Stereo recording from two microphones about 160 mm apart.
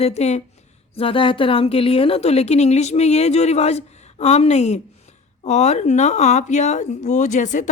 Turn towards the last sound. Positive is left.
turn(degrees=50)  # may be behind; listen again after turning